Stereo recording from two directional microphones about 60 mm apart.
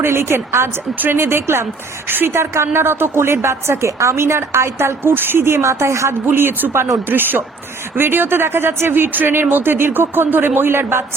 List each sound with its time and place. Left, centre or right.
0.0 s a woman's voice: right
5.6 s a woman's voice: right
6.2 s speech: right